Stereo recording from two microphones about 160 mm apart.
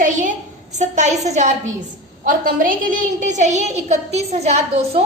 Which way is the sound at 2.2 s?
60° right (ahead or behind).